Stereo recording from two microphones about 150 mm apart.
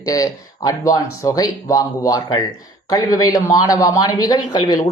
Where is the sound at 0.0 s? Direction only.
25° left (ahead or behind).